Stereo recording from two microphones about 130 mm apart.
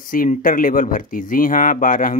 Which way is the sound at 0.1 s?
90° left.